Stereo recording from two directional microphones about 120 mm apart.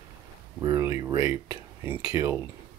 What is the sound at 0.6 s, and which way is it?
Speech, 30° right (ahead or behind).